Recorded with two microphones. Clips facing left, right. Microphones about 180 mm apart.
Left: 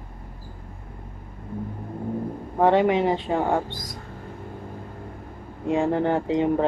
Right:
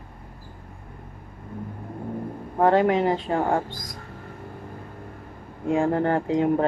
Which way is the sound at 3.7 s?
25° left (ahead or behind).